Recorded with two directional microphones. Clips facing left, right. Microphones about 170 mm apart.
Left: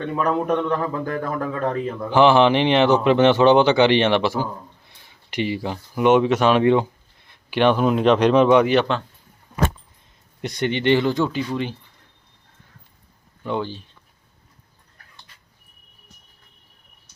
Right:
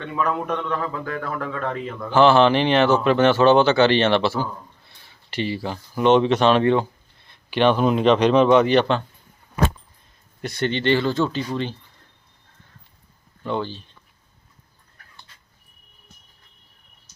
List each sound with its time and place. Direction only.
0.3 s speech: 15° left (ahead or behind)
1.5 s a man's voice: 35° left (ahead or behind)
2.0 s speech: 15° left (ahead or behind)
10.4 s speech: 15° left (ahead or behind)
13.4 s speech: 15° left (ahead or behind)